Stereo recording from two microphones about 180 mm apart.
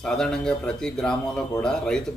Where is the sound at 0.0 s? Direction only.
5° left (ahead or behind).